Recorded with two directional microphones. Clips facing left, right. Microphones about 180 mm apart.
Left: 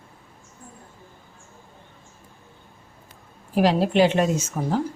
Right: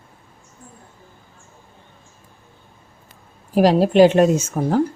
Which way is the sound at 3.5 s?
40° right (ahead or behind).